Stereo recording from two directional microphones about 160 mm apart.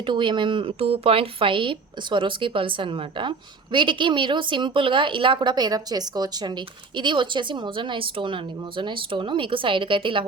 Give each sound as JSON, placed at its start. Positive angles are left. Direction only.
{"t": 0.0, "sound": "a woman's voice", "side_deg": -30}